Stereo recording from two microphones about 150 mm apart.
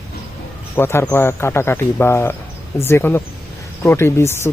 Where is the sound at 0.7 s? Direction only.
15° left (ahead or behind).